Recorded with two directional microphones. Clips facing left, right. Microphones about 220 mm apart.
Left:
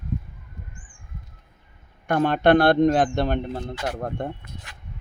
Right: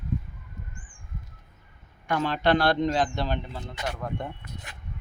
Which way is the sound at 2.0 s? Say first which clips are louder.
Left 6 dB; 55° left (ahead or behind).